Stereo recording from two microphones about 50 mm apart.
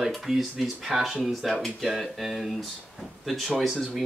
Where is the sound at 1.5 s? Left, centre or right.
Centre.